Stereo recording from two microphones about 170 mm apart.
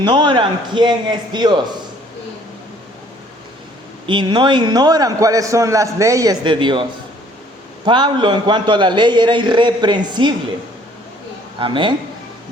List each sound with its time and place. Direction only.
0.0 s a man's voice: 25° right (ahead or behind)
4.0 s a man's voice: 30° right (ahead or behind)
7.9 s a man's voice: 25° right (ahead or behind)
11.6 s a man's voice: 30° right (ahead or behind)